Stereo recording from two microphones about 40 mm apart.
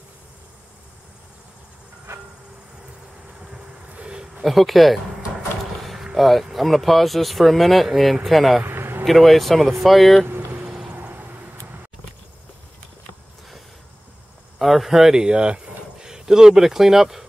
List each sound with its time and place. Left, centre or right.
4.4 s speech: centre
5.8 s vehicle: centre
6.1 s speech: centre
8.6 s a sound: right
9.0 s speech: centre
10.5 s a sound: right
10.9 s vehicle: right
14.6 s speech: centre
15.3 s speech: right; by 17.3 s centre